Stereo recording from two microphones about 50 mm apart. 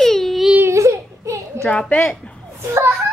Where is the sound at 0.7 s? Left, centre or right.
Right.